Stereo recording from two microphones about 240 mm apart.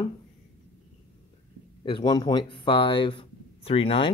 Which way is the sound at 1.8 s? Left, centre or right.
Centre.